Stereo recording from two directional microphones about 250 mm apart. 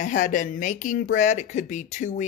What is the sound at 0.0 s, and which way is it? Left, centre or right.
A woman's voice, left.